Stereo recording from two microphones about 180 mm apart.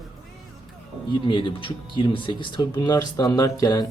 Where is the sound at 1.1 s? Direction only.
25° left (ahead or behind).